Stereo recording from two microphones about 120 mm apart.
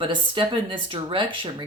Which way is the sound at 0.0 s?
45° right (ahead or behind).